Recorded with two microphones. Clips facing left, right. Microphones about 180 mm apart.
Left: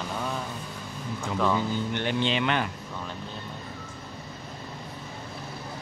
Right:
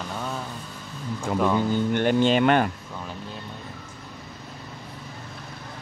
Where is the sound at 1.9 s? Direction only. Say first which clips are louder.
Right 7 dB; 45° right (ahead or behind).